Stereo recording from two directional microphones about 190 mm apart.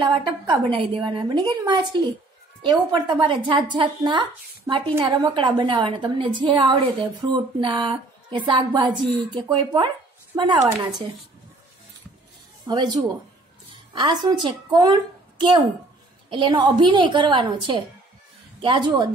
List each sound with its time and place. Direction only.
0.1 s a woman's voice: 25° right (ahead or behind)
12.6 s a woman's voice: 25° right (ahead or behind)
14.2 s a woman's voice: 20° right (ahead or behind)